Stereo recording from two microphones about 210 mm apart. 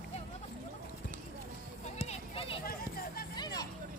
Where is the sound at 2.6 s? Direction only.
45° left (ahead or behind).